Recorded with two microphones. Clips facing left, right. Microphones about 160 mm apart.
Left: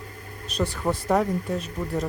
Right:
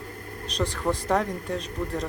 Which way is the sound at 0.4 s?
5° left (ahead or behind).